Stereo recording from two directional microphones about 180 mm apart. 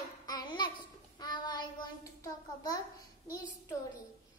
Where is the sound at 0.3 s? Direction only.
25° left (ahead or behind).